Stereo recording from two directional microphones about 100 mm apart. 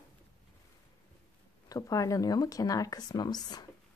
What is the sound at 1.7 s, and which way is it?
A woman's voice, 35° left (ahead or behind).